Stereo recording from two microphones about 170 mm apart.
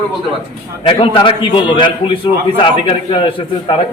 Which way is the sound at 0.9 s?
30° left (ahead or behind).